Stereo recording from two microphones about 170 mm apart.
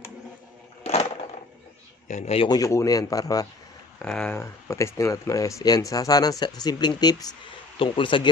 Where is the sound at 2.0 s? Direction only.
40° left (ahead or behind).